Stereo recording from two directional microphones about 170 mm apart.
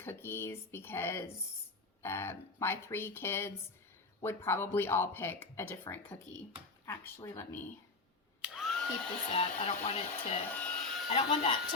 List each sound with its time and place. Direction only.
0.0 s speech: 15° left (ahead or behind)
8.4 s vacuum cleaner: centre (ahead or behind)
9.3 s speech: 35° left (ahead or behind)
10.6 s a sound: 5° left (ahead or behind)
11.1 s speech: 35° left (ahead or behind)